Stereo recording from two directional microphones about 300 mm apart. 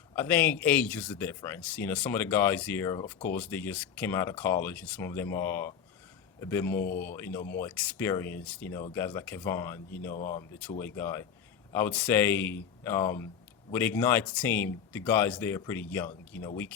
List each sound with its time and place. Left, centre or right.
0.2 s speech: centre